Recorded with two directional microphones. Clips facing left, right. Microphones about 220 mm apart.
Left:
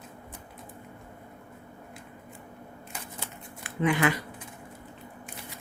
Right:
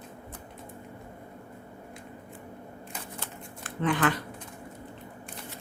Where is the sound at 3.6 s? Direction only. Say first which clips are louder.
Left 1 dB; 10° left (ahead or behind).